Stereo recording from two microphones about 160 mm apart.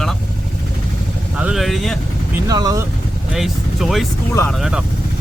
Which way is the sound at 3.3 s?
Centre (ahead or behind).